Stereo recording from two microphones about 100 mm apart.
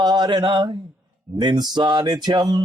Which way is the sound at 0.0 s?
45° right (ahead or behind).